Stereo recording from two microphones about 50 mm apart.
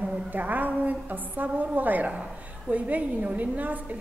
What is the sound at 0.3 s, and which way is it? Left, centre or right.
A woman's voice, right.